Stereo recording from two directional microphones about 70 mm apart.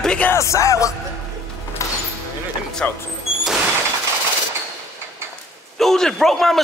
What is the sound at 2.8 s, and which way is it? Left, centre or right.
Speech, centre.